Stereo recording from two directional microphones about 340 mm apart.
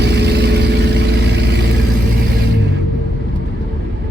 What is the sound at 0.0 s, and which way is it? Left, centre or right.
Vehicle, right.